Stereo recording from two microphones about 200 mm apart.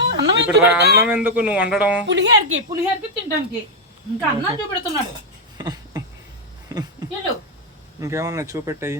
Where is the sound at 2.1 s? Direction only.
60° right (ahead or behind).